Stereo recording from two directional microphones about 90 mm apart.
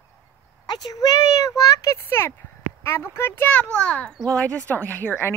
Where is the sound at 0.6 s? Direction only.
50° left (ahead or behind).